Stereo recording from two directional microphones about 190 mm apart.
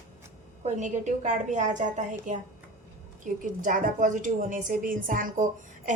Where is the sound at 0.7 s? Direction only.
40° right (ahead or behind).